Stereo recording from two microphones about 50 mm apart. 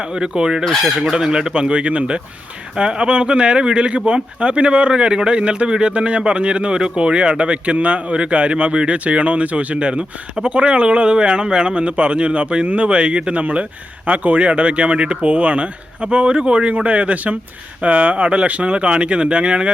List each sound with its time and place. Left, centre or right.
0.2 s speech: centre
0.6 s chicken: centre
1.1 s speech: centre